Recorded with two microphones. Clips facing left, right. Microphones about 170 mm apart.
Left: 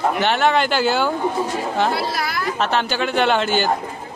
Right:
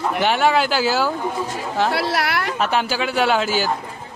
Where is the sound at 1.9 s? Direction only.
75° right (ahead or behind).